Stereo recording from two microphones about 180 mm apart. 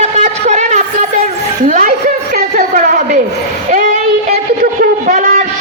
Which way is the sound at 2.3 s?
50° right (ahead or behind).